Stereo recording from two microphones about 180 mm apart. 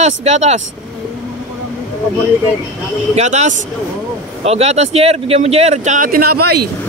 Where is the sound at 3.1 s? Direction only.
40° right (ahead or behind).